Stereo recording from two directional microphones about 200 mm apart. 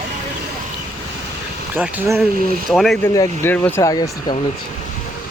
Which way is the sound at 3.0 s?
15° left (ahead or behind).